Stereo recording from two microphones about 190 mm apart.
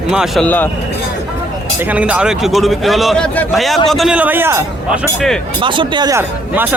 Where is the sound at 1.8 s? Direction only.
10° right (ahead or behind).